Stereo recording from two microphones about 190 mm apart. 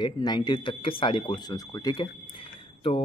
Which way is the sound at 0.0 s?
20° left (ahead or behind).